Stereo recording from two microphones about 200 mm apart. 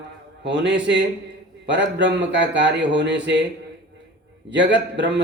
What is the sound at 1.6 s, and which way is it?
A man's voice, 60° right (ahead or behind).